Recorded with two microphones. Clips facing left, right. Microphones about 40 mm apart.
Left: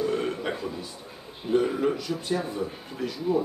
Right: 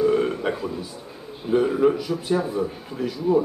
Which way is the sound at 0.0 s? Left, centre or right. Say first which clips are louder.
Right 7 dB; centre.